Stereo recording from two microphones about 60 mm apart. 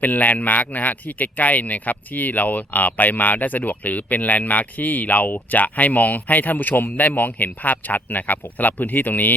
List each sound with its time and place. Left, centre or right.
0.0 s speech: left